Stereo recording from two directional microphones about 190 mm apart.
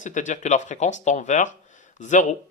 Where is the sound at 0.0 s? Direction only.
40° left (ahead or behind).